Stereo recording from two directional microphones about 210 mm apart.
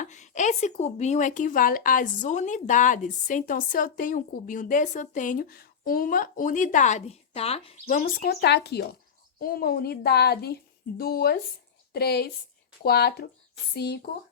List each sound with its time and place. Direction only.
0.0 s a woman's voice: 35° left (ahead or behind); by 14.1 s 50° left (ahead or behind)